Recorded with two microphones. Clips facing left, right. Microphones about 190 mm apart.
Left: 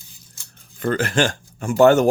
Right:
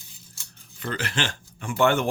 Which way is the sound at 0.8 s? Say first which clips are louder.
Left 10 dB; 45° left (ahead or behind).